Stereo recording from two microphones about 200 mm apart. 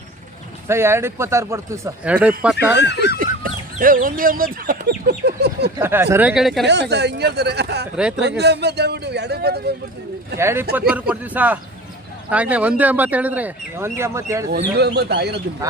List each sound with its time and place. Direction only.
0.7 s a man's voice: 10° right (ahead or behind)
2.7 s speech: 60° left (ahead or behind)
3.2 s speech: 45° right (ahead or behind)
5.8 s a man's voice: 10° right (ahead or behind)
6.7 s a man's voice: 60° right (ahead or behind)
7.9 s speech: 5° right (ahead or behind)
8.2 s a man's voice: 55° right (ahead or behind)
10.3 s a man's voice: 10° right (ahead or behind)
14.5 s a man's voice: 55° right (ahead or behind)